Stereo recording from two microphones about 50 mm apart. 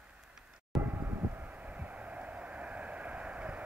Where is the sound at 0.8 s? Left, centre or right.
Right.